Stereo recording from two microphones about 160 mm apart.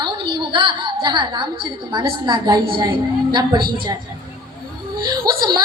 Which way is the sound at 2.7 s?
30° right (ahead or behind).